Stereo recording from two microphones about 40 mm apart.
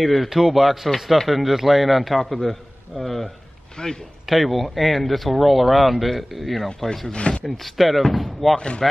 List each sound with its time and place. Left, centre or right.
0.0 s speech: centre
3.8 s speech: left
4.3 s speech: centre
7.1 s speech: left
7.4 s speech: centre
8.5 s speech: left